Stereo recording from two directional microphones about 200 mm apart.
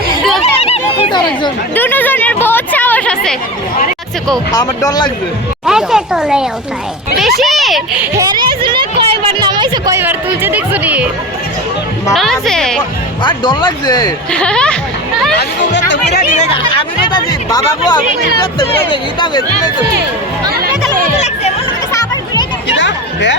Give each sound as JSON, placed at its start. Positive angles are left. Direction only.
{"t": 0.6, "sound": "honk", "side_deg": 25}
{"t": 1.7, "sound": "speech", "side_deg": 10}
{"t": 4.5, "sound": "speech", "side_deg": 20}
{"t": 5.6, "sound": "a child's voice", "side_deg": 0}
{"t": 8.2, "sound": "a sound", "side_deg": -25}
{"t": 12.1, "sound": "speech", "side_deg": 0}
{"t": 13.2, "sound": "speech", "side_deg": 25}
{"t": 14.3, "sound": "speech", "side_deg": 5}
{"t": 15.4, "sound": "speech", "side_deg": 60}
{"t": 16.3, "sound": "speech", "side_deg": 30}
{"t": 22.8, "sound": "a sound", "side_deg": 65}